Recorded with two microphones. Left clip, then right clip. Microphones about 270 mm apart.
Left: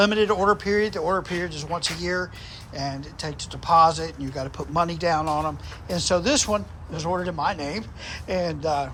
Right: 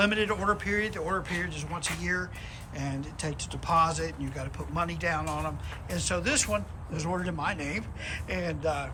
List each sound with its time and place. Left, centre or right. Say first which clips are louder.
0.0 s speech: left 7 dB; centre